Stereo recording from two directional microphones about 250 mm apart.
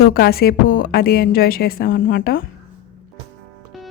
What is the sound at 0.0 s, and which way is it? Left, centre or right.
A woman's voice, left.